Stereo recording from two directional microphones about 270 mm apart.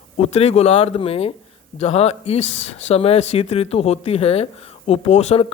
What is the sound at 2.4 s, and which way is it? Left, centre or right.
Speech, left.